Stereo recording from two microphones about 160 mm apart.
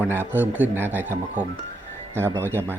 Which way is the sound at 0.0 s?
10° right (ahead or behind).